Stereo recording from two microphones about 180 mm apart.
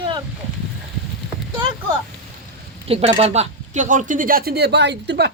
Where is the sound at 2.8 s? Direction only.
35° right (ahead or behind); by 5.3 s 70° right (ahead or behind).